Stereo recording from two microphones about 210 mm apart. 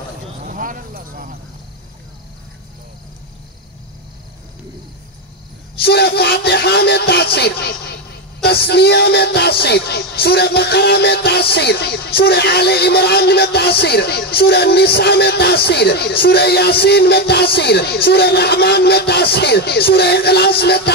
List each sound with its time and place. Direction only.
0.5 s a sound: 40° right (ahead or behind)
5.8 s music: 50° left (ahead or behind)
8.5 s speech: 50° left (ahead or behind)